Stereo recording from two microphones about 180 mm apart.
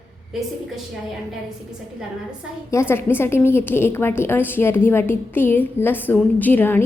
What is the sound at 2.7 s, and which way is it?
A woman's voice, 15° left (ahead or behind).